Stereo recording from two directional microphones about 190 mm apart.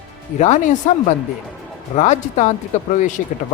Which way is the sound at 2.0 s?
40° left (ahead or behind).